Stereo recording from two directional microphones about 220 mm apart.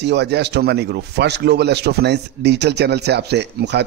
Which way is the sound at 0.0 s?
50° right (ahead or behind).